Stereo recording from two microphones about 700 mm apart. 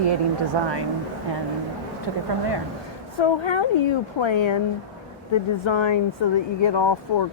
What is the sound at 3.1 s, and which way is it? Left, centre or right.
Speech, left.